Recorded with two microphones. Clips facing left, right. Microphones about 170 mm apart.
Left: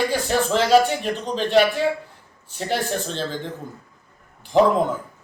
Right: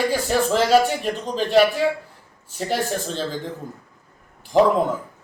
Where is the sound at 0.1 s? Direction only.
5° right (ahead or behind).